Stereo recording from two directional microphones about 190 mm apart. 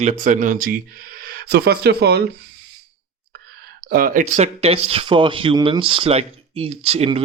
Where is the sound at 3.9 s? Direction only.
50° right (ahead or behind); by 7.2 s 30° right (ahead or behind).